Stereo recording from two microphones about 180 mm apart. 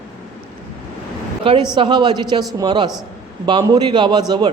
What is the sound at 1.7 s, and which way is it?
A man's voice, 25° right (ahead or behind).